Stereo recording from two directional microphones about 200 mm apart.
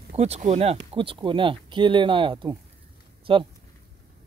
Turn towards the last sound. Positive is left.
turn(degrees=-25)  # may be behind; listen again after turning